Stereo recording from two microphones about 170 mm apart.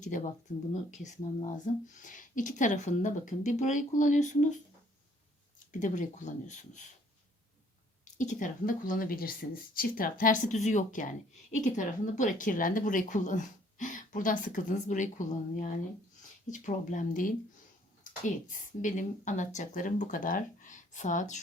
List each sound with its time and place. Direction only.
0.1 s speech: 50° left (ahead or behind)
5.8 s speech: 45° left (ahead or behind)
8.0 s speech: 45° left (ahead or behind)